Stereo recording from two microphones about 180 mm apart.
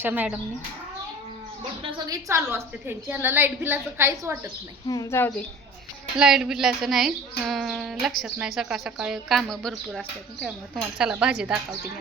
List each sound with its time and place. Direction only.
0.0 s a woman's voice: 10° right (ahead or behind)
1.8 s a woman's voice: 30° right (ahead or behind)
2.2 s a woman's voice: 15° right (ahead or behind)
4.9 s speech: 15° left (ahead or behind)
6.1 s speech: 5° right (ahead or behind)